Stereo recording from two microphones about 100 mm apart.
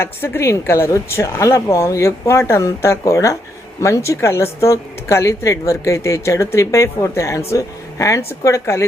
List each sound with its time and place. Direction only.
0.0 s speech: 25° left (ahead or behind)